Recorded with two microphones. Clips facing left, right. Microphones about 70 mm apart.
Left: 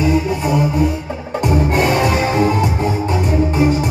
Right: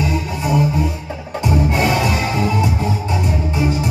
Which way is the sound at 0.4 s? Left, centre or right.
Left.